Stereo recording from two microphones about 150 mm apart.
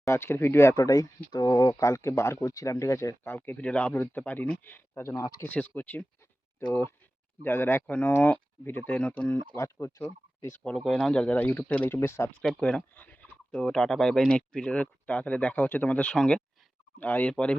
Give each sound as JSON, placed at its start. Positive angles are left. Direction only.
{"t": 0.0, "sound": "speech", "side_deg": 15}
{"t": 10.6, "sound": "speech", "side_deg": 0}
{"t": 12.4, "sound": "speech", "side_deg": 5}